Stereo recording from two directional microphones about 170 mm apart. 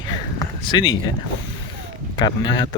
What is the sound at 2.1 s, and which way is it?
Speech, 25° left (ahead or behind).